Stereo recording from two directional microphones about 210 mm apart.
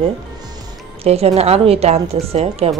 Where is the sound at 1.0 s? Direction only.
30° right (ahead or behind).